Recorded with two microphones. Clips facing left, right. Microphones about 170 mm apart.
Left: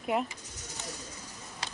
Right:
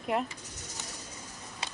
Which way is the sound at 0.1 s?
Centre (ahead or behind).